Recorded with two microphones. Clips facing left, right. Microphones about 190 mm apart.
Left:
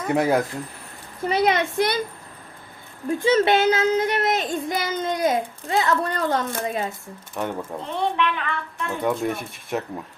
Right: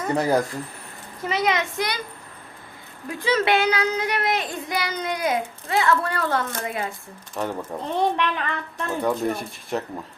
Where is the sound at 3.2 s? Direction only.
25° left (ahead or behind).